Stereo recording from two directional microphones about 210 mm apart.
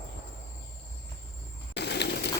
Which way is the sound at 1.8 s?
55° left (ahead or behind).